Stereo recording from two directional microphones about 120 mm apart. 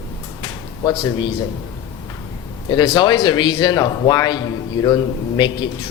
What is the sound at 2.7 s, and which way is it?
Speech, 35° left (ahead or behind).